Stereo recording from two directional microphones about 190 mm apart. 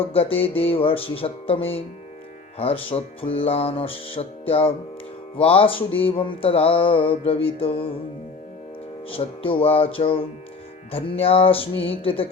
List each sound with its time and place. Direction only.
0.0 s music: 30° left (ahead or behind)
9.0 s music: 30° left (ahead or behind)